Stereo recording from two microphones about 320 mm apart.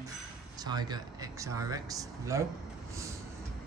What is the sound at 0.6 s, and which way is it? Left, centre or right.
Speech, centre.